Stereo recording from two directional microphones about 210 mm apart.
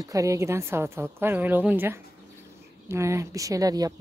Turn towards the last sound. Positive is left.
turn(degrees=-15)  # may be behind; listen again after turning